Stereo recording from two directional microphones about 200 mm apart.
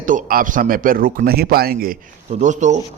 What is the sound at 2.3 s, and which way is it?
Speech, 35° right (ahead or behind).